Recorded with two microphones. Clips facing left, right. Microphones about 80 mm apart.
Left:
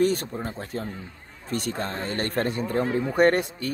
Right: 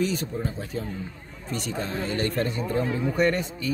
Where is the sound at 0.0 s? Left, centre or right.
Left.